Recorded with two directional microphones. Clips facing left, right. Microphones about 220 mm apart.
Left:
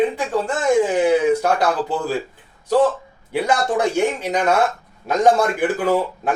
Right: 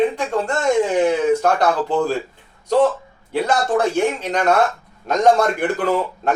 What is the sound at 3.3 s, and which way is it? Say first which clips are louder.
A man's voice: right 1 dB; 10° left (ahead or behind).